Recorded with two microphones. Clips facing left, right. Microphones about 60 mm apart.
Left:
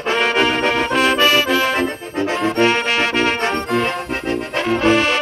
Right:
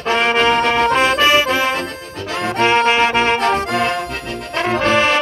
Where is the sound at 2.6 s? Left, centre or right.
Right.